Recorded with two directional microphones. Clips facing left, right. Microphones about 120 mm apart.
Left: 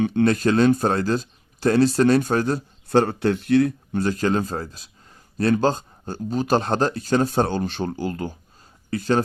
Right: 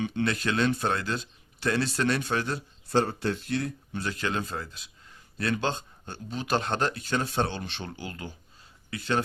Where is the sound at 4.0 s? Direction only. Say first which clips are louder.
Left 9 dB; 40° left (ahead or behind).